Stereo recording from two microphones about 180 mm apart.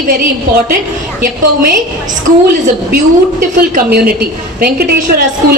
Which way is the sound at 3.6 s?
60° right (ahead or behind).